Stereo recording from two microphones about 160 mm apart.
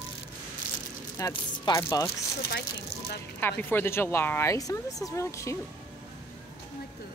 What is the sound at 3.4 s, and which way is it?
A woman's voice, 15° left (ahead or behind).